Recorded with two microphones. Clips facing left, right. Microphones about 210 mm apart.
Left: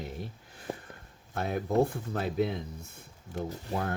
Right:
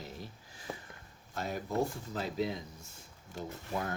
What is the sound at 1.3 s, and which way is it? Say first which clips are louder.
Speech: left 7 dB; 60° left (ahead or behind).